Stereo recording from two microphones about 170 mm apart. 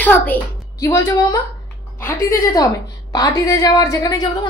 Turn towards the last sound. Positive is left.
turn(degrees=20)  # may be behind; listen again after turning